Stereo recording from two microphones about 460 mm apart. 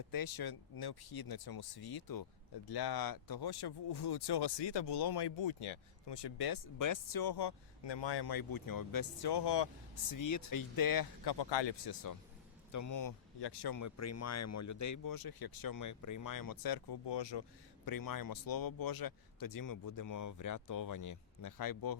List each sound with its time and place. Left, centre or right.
0.1 s speech: left
12.7 s speech: left
13.4 s speech: left
17.8 s speech: left